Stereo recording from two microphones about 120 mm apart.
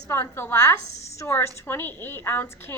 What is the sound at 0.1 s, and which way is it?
A woman's voice, 20° left (ahead or behind).